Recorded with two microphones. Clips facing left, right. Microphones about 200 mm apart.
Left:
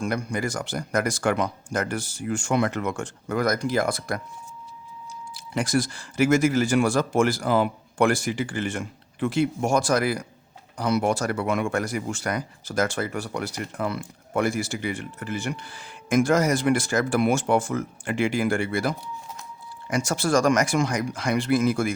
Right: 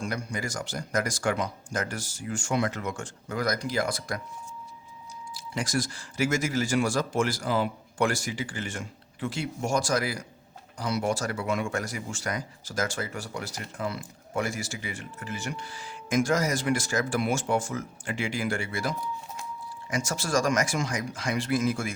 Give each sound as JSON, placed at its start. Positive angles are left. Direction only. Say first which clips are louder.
{"t": 0.0, "sound": "speech", "louder": "left 6 dB", "side_deg": 55}
{"t": 5.3, "sound": "speech", "louder": "left 6 dB", "side_deg": 60}